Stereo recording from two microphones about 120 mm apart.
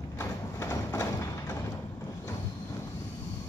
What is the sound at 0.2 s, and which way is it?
Horse, 20° left (ahead or behind).